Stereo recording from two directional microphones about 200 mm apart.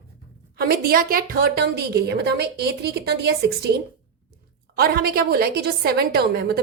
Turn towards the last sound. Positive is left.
turn(degrees=-50)  # may be behind; listen again after turning